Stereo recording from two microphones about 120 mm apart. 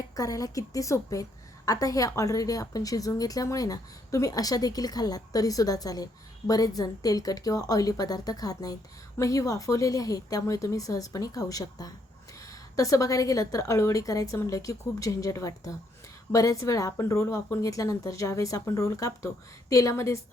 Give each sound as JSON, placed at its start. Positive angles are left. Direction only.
{"t": 0.2, "sound": "a woman's voice", "side_deg": 30}